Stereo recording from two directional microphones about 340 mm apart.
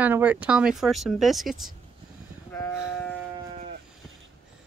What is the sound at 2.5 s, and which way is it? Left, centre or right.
Sheep, centre.